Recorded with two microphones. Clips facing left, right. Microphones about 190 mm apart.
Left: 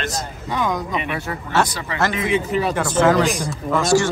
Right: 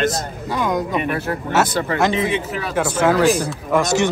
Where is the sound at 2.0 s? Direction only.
25° right (ahead or behind).